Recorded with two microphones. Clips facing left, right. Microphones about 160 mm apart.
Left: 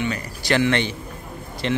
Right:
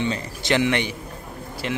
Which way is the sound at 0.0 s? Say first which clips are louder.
Right 1 dB; 25° right (ahead or behind).